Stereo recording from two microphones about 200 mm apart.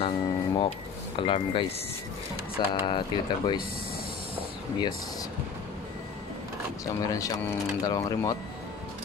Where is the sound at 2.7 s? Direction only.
25° left (ahead or behind).